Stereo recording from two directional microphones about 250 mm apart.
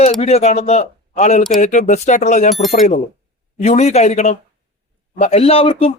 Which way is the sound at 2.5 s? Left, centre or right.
Centre.